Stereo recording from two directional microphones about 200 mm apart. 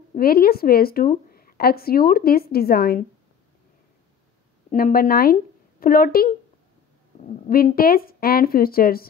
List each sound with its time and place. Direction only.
0.1 s speech: 50° left (ahead or behind)
4.6 s speech: 45° left (ahead or behind)
7.4 s speech: 45° left (ahead or behind)